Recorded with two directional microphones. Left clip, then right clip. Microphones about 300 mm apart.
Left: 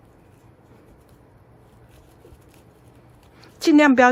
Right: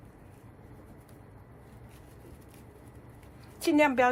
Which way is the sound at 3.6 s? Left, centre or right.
Left.